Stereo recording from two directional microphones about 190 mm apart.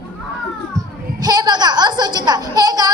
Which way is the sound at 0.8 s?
20° right (ahead or behind).